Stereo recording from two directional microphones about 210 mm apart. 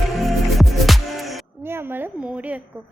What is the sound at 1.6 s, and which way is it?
Speech, 10° right (ahead or behind).